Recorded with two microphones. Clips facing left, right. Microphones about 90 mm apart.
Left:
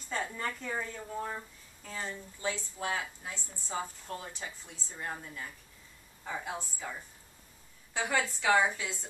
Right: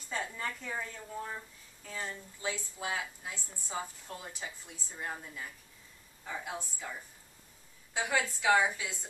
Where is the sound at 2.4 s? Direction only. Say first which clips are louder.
Left 2 dB; 5° right (ahead or behind).